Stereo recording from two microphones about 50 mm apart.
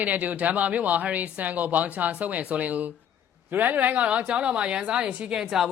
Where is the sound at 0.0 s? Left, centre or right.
Right.